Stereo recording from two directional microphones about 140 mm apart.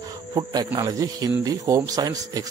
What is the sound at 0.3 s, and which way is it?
Speech, 30° right (ahead or behind).